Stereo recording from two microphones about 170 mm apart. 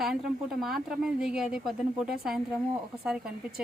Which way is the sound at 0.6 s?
5° right (ahead or behind).